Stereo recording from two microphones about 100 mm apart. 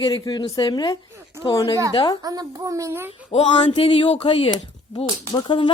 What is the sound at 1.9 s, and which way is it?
Speech, 55° left (ahead or behind).